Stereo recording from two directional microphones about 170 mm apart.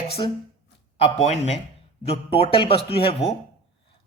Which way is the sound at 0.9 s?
40° left (ahead or behind).